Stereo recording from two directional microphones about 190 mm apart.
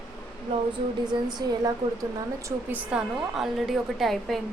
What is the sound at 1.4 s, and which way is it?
Speech, 20° right (ahead or behind).